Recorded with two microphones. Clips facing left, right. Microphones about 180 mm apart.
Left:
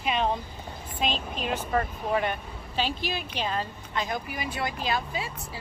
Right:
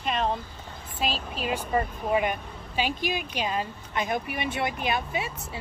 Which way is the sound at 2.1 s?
10° right (ahead or behind).